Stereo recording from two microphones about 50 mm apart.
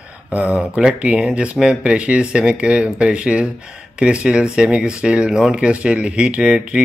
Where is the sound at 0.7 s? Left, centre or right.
Centre.